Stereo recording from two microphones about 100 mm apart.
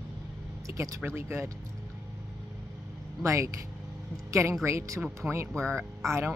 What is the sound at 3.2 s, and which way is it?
Speech, 30° right (ahead or behind).